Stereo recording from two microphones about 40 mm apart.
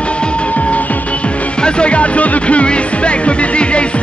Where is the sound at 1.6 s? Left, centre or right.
Left.